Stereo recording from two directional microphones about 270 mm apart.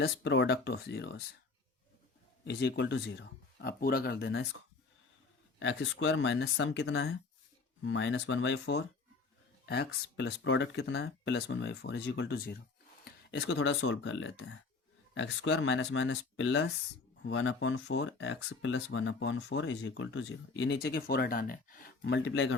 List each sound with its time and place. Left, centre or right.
0.0 s speech: left
2.4 s speech: left
5.5 s speech: left